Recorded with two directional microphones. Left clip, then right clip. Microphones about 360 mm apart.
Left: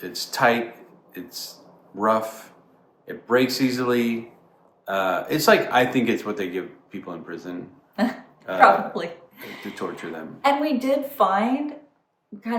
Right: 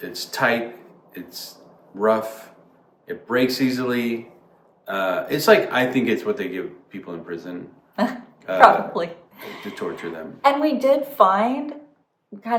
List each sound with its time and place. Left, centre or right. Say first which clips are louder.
0.0 s speech: left 1 dB; centre
8.0 s a woman's voice: right 2 dB; centre
9.7 s speech: right 2 dB; centre
10.4 s a woman's voice: right 4 dB; centre